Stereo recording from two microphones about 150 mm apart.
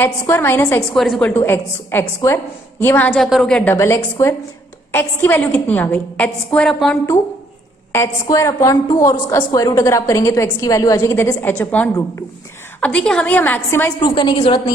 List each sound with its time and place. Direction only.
0.0 s a woman's voice: 15° left (ahead or behind)
0.9 s a woman's voice: centre (ahead or behind)
1.3 s a woman's voice: 15° left (ahead or behind)
3.7 s a woman's voice: 20° left (ahead or behind)
7.9 s a woman's voice: 20° left (ahead or behind)
14.0 s a woman's voice: 30° left (ahead or behind)